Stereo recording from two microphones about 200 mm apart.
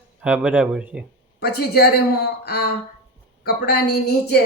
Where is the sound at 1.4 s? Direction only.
50° left (ahead or behind).